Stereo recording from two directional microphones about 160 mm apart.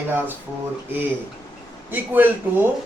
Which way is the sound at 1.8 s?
10° right (ahead or behind).